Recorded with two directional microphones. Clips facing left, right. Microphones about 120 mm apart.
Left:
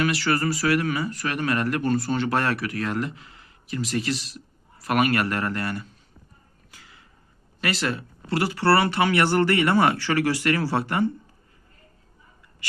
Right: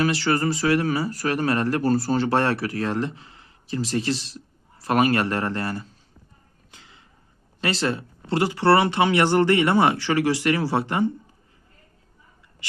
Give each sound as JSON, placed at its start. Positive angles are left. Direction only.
{"t": 0.0, "sound": "speech", "side_deg": -30}
{"t": 6.7, "sound": "a sound", "side_deg": -25}
{"t": 7.6, "sound": "speech", "side_deg": -30}